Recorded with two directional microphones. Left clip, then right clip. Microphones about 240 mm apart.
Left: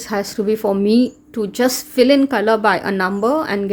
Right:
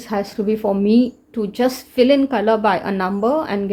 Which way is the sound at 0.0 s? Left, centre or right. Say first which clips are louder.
Left 1 dB; centre.